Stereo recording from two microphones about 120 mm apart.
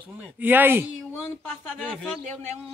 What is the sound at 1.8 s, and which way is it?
Speech, 5° right (ahead or behind).